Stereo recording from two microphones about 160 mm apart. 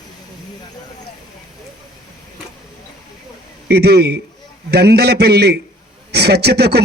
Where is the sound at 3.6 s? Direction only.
90° right.